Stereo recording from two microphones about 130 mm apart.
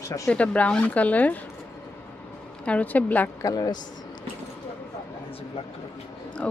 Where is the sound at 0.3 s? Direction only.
10° left (ahead or behind).